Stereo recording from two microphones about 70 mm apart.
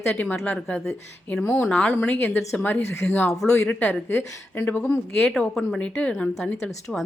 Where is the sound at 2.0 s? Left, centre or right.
Left.